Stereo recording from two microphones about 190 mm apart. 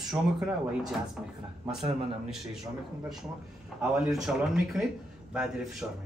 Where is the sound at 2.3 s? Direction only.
Centre (ahead or behind).